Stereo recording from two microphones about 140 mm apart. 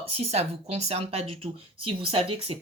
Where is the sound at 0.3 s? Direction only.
50° right (ahead or behind).